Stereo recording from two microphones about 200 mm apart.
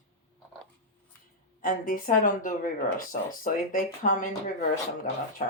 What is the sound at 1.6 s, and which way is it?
Speech, 45° left (ahead or behind).